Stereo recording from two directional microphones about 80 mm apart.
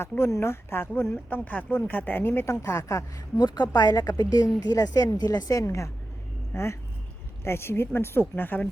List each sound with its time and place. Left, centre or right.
0.0 s speech: left
3.3 s a woman's voice: left